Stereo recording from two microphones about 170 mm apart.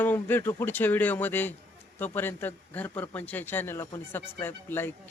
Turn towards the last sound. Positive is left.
turn(degrees=10)  # may be behind; listen again after turning